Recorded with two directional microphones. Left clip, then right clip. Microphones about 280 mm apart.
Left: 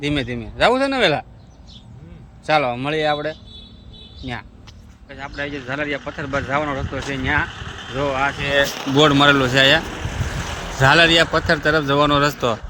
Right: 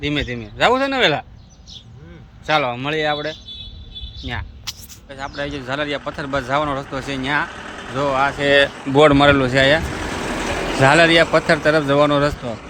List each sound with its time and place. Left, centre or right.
0.0 s speech: centre
2.5 s speech: centre
5.0 s speech: centre
7.5 s vehicle: centre
7.9 s speech: centre
9.8 s boat: right
10.8 s speech: centre